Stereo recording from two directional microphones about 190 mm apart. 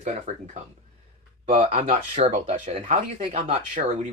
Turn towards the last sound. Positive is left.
turn(degrees=-40)  # may be behind; listen again after turning